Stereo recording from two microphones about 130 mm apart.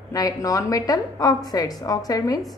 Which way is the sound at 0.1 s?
25° left (ahead or behind).